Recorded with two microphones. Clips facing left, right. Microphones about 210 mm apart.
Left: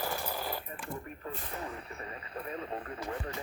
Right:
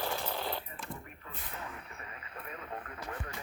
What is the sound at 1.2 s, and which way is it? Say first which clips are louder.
Radio: left 5 dB; 35° left (ahead or behind).